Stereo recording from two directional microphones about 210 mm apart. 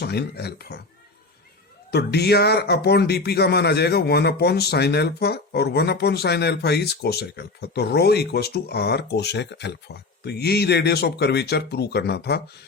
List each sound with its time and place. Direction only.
0.0 s speech: 50° left (ahead or behind)
1.9 s speech: 50° left (ahead or behind)